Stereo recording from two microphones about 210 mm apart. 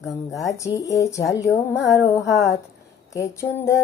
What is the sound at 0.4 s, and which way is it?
Music, 15° left (ahead or behind).